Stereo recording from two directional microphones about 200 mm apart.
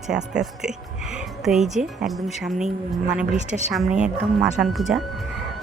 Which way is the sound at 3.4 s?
35° right (ahead or behind).